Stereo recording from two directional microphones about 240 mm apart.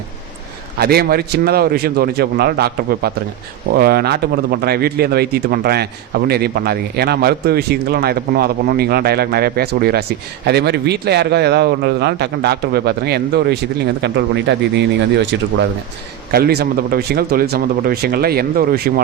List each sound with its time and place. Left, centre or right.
0.8 s speech: right